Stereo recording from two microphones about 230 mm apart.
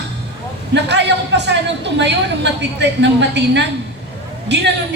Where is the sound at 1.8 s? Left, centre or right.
Right.